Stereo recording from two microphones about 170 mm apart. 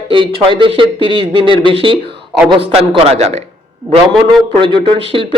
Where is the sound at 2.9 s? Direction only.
35° right (ahead or behind).